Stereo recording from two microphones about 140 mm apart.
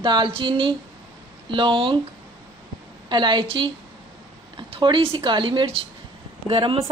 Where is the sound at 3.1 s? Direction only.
35° right (ahead or behind).